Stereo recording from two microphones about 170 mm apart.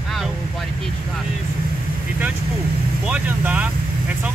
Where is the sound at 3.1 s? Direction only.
10° right (ahead or behind).